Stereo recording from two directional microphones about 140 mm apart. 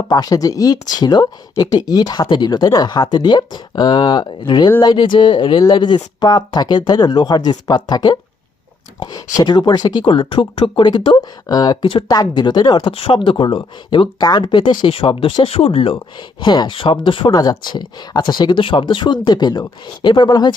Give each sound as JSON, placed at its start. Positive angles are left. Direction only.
{"t": 0.1, "sound": "speech", "side_deg": 25}
{"t": 9.4, "sound": "speech", "side_deg": 30}
{"t": 16.4, "sound": "speech", "side_deg": 30}